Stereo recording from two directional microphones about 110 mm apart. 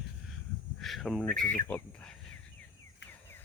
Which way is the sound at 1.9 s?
5° left (ahead or behind).